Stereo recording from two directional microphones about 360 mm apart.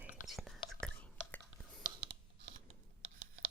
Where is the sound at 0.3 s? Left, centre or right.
Centre.